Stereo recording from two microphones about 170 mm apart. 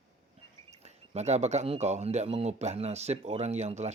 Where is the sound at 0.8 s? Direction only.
40° right (ahead or behind).